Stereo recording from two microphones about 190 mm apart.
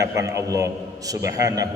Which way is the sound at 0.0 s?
15° right (ahead or behind).